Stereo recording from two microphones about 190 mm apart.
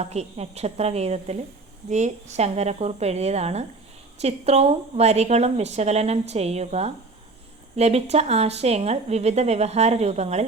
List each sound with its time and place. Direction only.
0.0 s a woman's voice: 35° right (ahead or behind)